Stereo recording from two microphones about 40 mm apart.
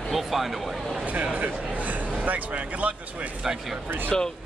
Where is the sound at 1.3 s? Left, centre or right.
Right.